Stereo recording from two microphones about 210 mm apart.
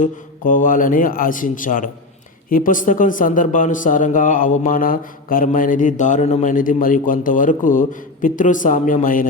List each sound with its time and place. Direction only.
0.0 s speech: 40° left (ahead or behind)